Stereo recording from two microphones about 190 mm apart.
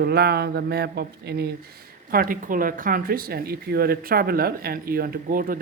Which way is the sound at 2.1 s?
50° right (ahead or behind).